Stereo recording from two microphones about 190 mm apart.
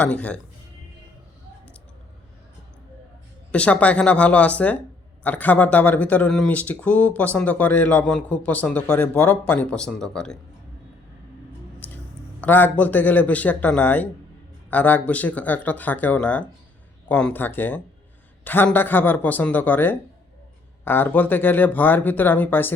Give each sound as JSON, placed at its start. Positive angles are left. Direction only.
{"t": 0.0, "sound": "speech", "side_deg": 5}
{"t": 3.5, "sound": "speech", "side_deg": 5}
{"t": 12.4, "sound": "speech", "side_deg": 10}